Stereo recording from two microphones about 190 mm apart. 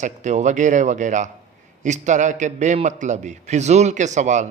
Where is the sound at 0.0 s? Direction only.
40° right (ahead or behind).